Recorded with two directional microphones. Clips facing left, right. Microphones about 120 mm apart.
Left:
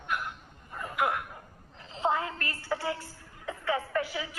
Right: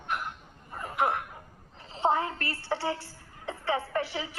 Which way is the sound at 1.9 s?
30° right (ahead or behind).